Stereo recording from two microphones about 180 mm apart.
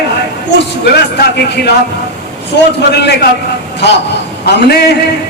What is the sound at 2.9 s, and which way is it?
Speech, 65° left (ahead or behind).